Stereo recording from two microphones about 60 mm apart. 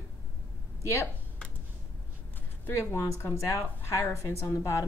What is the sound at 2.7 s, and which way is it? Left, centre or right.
A woman's voice, left.